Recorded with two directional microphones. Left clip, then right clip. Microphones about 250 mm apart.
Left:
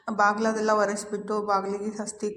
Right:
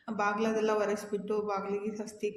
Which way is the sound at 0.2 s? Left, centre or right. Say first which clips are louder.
Left 7 dB; centre.